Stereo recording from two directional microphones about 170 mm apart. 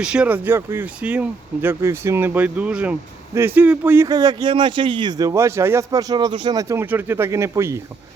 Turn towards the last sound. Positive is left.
turn(degrees=-15)  # may be behind; listen again after turning